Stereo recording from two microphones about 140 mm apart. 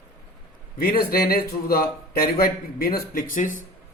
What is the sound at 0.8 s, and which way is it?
Speech, 90° left.